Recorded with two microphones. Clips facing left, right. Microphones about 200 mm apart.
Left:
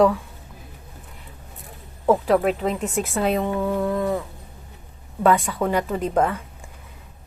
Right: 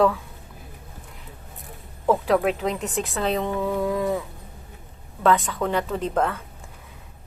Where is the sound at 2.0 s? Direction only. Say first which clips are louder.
Left 2 dB; centre (ahead or behind).